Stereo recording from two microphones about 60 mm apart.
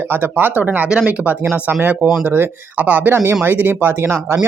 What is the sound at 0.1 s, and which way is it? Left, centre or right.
Speech, right.